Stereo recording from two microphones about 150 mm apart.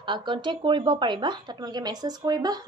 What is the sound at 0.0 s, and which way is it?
A woman's voice, 35° right (ahead or behind).